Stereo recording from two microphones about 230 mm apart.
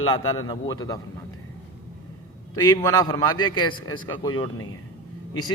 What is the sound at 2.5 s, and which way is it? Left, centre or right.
A man's voice, centre.